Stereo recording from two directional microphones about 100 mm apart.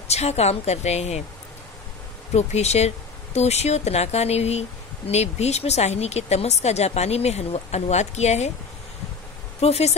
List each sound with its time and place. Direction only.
0.1 s speech: 90° left
2.3 s speech: 90° left
9.6 s speech: 90° left